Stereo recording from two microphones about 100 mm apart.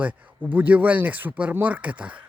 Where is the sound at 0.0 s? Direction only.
15° right (ahead or behind).